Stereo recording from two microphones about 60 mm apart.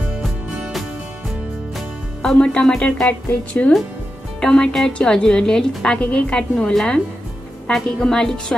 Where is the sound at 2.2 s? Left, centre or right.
Centre.